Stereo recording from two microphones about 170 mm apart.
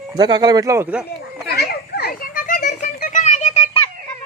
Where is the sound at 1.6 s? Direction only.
70° left (ahead or behind); by 2.8 s 45° left (ahead or behind).